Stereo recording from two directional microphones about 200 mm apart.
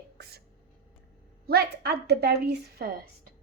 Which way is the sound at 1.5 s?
50° right (ahead or behind).